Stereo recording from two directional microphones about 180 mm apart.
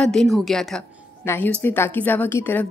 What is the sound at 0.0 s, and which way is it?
A woman's voice, 5° left (ahead or behind).